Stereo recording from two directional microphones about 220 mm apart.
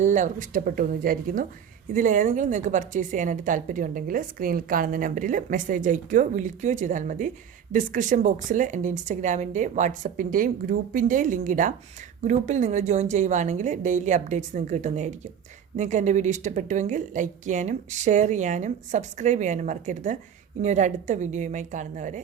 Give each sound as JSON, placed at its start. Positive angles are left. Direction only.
{"t": 0.0, "sound": "a woman's voice", "side_deg": -35}